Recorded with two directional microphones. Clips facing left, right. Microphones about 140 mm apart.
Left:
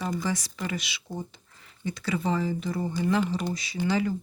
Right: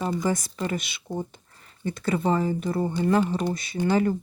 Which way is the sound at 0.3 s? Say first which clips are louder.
Right 4 dB; 50° right (ahead or behind).